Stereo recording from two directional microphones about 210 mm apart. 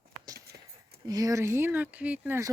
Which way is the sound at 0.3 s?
45° right (ahead or behind).